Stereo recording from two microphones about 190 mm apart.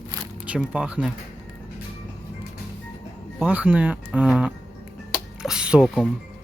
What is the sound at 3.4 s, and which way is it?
Speech, 10° right (ahead or behind).